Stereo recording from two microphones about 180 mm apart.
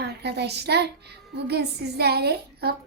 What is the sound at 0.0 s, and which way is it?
A woman's voice, 65° right (ahead or behind).